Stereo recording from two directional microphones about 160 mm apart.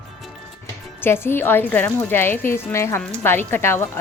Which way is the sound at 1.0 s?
15° left (ahead or behind).